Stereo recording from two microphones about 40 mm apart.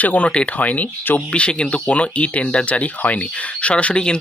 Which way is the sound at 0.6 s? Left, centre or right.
Left.